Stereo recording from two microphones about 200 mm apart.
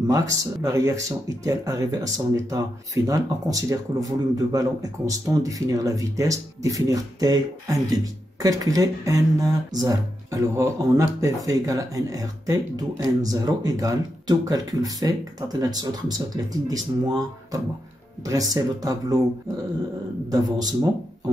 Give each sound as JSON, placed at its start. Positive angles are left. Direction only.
{"t": 0.0, "sound": "speech", "side_deg": -15}
{"t": 20.2, "sound": "speech", "side_deg": -20}